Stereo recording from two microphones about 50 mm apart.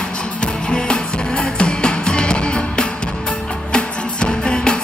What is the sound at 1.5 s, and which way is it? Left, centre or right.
Music, centre.